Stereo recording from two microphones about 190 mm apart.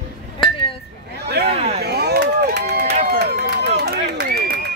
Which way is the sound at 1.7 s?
60° right (ahead or behind).